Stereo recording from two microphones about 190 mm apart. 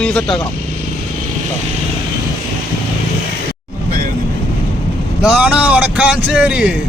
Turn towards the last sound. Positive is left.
turn(degrees=-5)  # may be behind; listen again after turning